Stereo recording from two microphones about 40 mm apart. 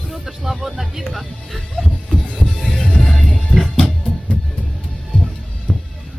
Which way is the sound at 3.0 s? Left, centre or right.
Left.